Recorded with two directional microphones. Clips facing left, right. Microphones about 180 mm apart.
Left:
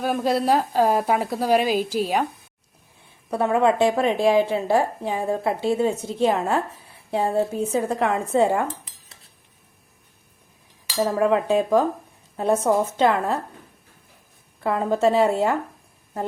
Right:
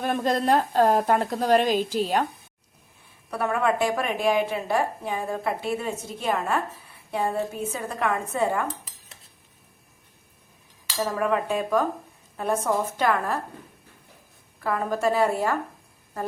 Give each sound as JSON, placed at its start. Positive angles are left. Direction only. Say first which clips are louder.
{"t": 0.0, "sound": "a woman's voice", "louder": "left 2 dB", "side_deg": 5}
{"t": 3.2, "sound": "speech", "louder": "left 5 dB", "side_deg": 25}
{"t": 11.0, "sound": "speech", "louder": "left 5 dB", "side_deg": 30}
{"t": 14.6, "sound": "speech", "louder": "left 5 dB", "side_deg": 25}